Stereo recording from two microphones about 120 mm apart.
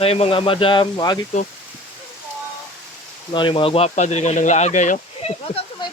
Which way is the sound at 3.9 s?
75° left (ahead or behind).